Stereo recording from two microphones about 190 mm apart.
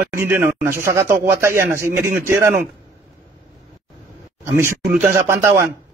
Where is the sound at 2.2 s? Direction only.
15° right (ahead or behind).